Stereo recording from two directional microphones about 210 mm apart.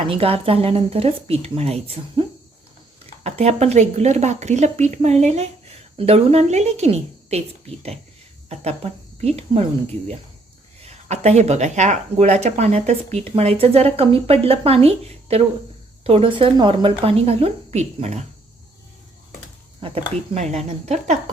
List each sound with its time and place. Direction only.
0.1 s speech: 25° right (ahead or behind)
3.2 s a woman's voice: 30° right (ahead or behind)
10.8 s speech: 30° right (ahead or behind)
19.8 s a woman's voice: 25° right (ahead or behind)